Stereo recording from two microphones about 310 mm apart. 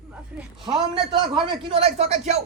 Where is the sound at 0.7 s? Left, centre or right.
Centre.